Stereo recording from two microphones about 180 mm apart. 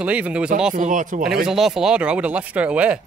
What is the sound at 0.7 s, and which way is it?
Speech, 45° right (ahead or behind).